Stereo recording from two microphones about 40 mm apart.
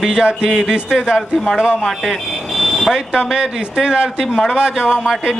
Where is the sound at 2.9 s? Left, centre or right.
Centre.